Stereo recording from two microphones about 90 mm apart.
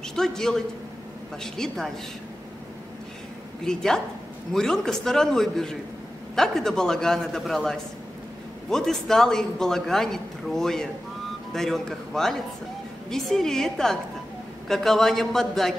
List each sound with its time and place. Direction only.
0.1 s a man's voice: 5° left (ahead or behind)
3.6 s a man's voice: 5° left (ahead or behind)